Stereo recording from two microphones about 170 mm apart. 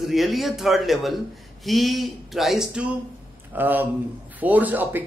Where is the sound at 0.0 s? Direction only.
Centre (ahead or behind).